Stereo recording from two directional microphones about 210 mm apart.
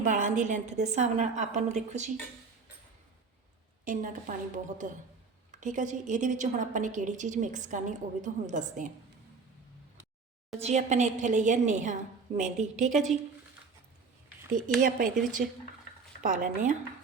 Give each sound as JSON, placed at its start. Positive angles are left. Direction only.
{"t": 0.0, "sound": "a woman's voice", "side_deg": -35}
{"t": 3.8, "sound": "a woman's voice", "side_deg": -40}
{"t": 10.6, "sound": "a woman's voice", "side_deg": -30}
{"t": 14.8, "sound": "a woman's voice", "side_deg": -40}